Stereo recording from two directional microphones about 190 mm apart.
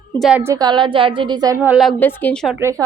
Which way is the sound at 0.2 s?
5° right (ahead or behind).